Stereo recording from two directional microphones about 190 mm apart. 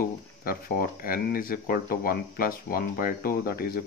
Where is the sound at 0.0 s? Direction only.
50° left (ahead or behind).